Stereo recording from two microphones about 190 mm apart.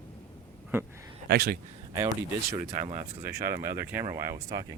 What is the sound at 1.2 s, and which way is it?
Speech, 55° right (ahead or behind).